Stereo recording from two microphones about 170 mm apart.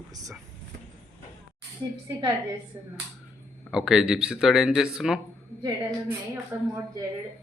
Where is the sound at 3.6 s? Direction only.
5° right (ahead or behind).